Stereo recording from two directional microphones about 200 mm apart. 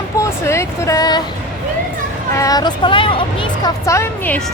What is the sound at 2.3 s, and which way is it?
Speech, 15° left (ahead or behind).